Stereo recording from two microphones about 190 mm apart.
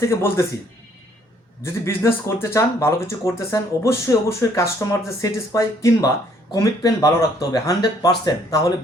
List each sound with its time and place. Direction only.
0.0 s speech: 15° left (ahead or behind)
1.6 s speech: 15° left (ahead or behind)